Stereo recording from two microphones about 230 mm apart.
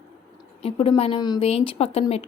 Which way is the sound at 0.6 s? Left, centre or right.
Left.